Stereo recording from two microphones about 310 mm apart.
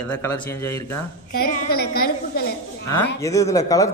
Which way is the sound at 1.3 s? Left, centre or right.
Left.